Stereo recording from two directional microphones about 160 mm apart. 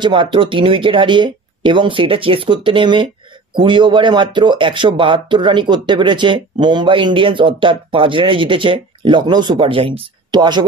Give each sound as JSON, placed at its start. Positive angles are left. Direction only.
{"t": 0.0, "sound": "speech", "side_deg": -30}